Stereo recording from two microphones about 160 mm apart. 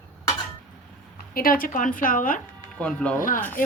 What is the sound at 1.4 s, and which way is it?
A woman's voice, 60° left (ahead or behind).